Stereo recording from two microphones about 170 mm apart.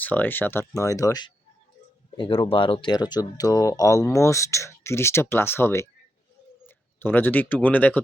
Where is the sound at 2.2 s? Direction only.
30° left (ahead or behind); by 8.0 s 10° left (ahead or behind).